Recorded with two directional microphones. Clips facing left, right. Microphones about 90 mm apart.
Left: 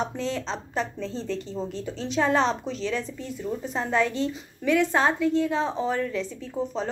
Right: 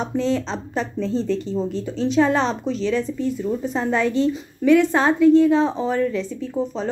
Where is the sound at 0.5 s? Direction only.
10° right (ahead or behind).